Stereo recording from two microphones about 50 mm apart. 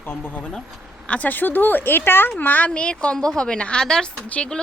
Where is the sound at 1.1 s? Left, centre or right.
Left.